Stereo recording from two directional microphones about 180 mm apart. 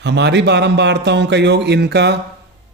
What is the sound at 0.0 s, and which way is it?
Speech, 70° right (ahead or behind).